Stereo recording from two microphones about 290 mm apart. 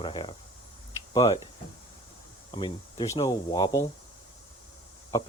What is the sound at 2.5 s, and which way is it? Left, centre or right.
Speech, centre.